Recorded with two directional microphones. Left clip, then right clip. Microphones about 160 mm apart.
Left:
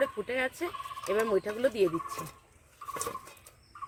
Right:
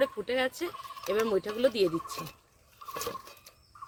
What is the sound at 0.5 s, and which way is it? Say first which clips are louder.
Fowl: left 1 dB; 40° right (ahead or behind).